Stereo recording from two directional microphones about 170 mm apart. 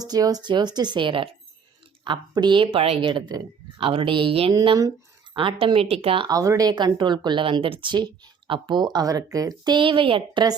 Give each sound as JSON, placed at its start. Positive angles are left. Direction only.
{"t": 0.0, "sound": "speech", "side_deg": -20}